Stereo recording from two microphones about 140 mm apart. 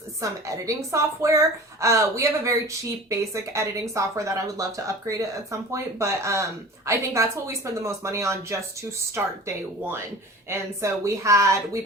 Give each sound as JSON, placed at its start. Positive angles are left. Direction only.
{"t": 0.2, "sound": "speech", "side_deg": -25}
{"t": 10.5, "sound": "speech", "side_deg": -20}